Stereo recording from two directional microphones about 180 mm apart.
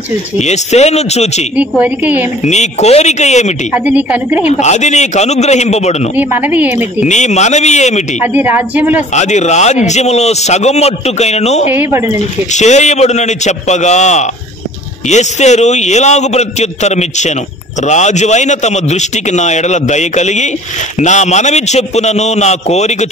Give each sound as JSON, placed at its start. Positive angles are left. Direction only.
{"t": 0.4, "sound": "a man's voice", "side_deg": 40}
{"t": 1.6, "sound": "a woman's voice", "side_deg": -10}
{"t": 2.4, "sound": "a man's voice", "side_deg": 40}
{"t": 3.7, "sound": "a woman's voice", "side_deg": -10}
{"t": 4.5, "sound": "a man's voice", "side_deg": 40}
{"t": 6.1, "sound": "a woman's voice", "side_deg": -10}
{"t": 7.1, "sound": "a man's voice", "side_deg": 40}
{"t": 8.3, "sound": "a woman's voice", "side_deg": -10}
{"t": 9.1, "sound": "a man's voice", "side_deg": 40}
{"t": 11.7, "sound": "a woman's voice", "side_deg": -15}
{"t": 12.2, "sound": "a man's voice", "side_deg": 40}